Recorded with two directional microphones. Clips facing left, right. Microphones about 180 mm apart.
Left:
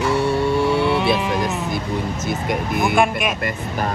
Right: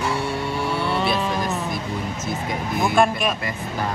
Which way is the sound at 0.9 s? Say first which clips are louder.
Left 4 dB; 15° left (ahead or behind).